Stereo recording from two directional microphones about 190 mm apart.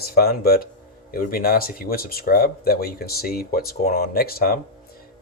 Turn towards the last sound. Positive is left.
turn(degrees=50)  # may be behind; listen again after turning